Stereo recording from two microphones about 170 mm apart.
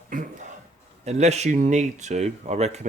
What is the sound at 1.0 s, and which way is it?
Speech, 40° right (ahead or behind).